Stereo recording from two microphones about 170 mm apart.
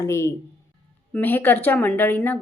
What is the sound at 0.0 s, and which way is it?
A woman's voice, 15° left (ahead or behind).